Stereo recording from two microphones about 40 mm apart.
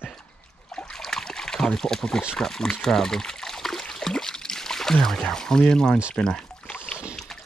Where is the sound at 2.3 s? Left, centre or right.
Centre.